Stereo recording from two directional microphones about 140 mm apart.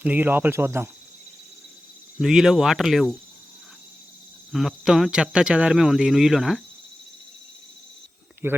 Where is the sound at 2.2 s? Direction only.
Centre (ahead or behind).